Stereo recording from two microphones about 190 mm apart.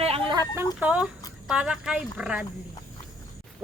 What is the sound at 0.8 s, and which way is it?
Speech, 5° right (ahead or behind).